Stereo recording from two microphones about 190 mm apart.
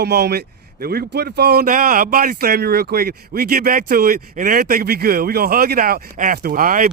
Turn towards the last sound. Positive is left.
turn(degrees=-45)  # may be behind; listen again after turning